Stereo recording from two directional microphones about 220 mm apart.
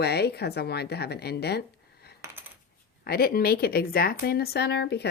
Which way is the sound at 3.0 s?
45° left (ahead or behind).